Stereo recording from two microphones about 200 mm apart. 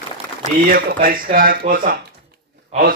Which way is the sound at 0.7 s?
45° right (ahead or behind).